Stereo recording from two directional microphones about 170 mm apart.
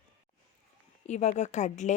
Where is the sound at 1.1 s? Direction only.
45° left (ahead or behind).